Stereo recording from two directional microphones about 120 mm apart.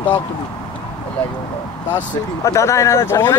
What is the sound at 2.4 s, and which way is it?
Speech, 25° left (ahead or behind).